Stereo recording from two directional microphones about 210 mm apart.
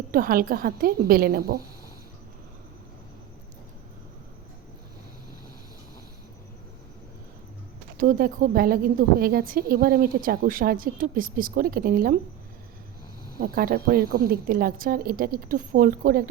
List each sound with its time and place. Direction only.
0.1 s a woman's voice: 45° right (ahead or behind)
7.9 s a woman's voice: 40° right (ahead or behind)
13.4 s a woman's voice: 45° right (ahead or behind)